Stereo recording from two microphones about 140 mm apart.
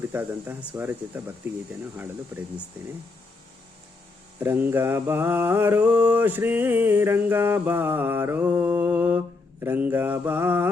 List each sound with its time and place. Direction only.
0.1 s mantra: 15° right (ahead or behind)
4.4 s mantra: 15° right (ahead or behind)